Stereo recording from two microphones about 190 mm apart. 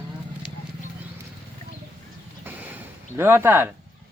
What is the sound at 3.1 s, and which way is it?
Speech, 10° right (ahead or behind).